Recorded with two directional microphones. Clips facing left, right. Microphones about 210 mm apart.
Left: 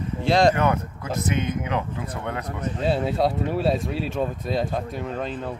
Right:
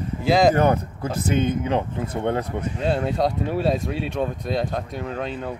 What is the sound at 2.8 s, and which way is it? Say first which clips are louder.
Speech: even; 5° left (ahead or behind).